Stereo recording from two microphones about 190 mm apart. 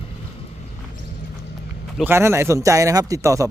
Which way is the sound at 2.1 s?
15° right (ahead or behind).